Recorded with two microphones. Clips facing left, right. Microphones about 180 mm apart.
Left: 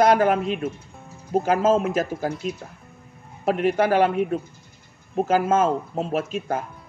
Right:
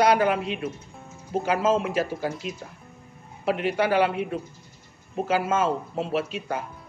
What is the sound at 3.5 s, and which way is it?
Speech, 45° left (ahead or behind).